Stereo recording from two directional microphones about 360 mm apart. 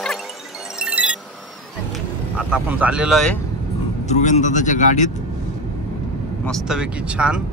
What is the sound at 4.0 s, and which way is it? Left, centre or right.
Speech, centre.